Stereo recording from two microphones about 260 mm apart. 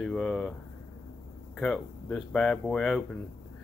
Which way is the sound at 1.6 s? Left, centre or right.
Centre.